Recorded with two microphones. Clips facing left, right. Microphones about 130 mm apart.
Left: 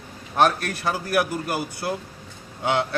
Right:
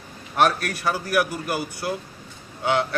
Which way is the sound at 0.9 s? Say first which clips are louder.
Left 1 dB; 25° left (ahead or behind).